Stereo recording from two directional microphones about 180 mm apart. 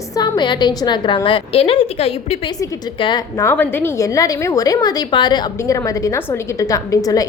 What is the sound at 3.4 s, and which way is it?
A woman's voice, 10° left (ahead or behind).